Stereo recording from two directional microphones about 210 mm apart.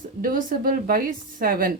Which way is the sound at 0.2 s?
40° right (ahead or behind).